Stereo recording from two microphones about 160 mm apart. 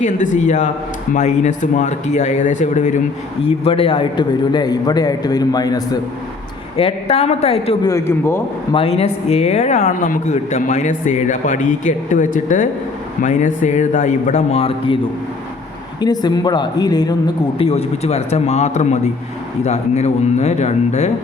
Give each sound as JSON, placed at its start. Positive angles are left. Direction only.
{"t": 0.0, "sound": "speech", "side_deg": 50}
{"t": 3.4, "sound": "a man's voice", "side_deg": 35}
{"t": 6.7, "sound": "speech", "side_deg": 35}
{"t": 7.9, "sound": "a man's voice", "side_deg": 20}
{"t": 8.7, "sound": "speech", "side_deg": 35}
{"t": 16.0, "sound": "a man's voice", "side_deg": 25}
{"t": 17.7, "sound": "speech", "side_deg": 40}